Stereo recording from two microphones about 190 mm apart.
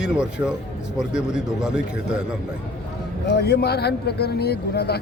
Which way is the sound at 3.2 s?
60° left (ahead or behind).